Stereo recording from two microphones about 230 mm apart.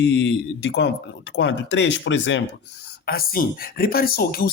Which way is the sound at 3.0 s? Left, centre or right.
Left.